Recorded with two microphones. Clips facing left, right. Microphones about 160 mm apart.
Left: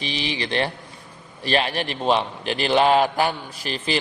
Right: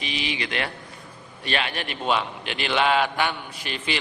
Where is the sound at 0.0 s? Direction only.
35° left (ahead or behind).